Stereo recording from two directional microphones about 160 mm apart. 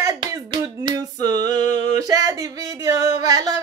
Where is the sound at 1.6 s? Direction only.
50° left (ahead or behind).